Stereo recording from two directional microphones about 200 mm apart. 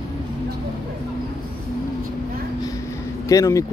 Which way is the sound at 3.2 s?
15° left (ahead or behind).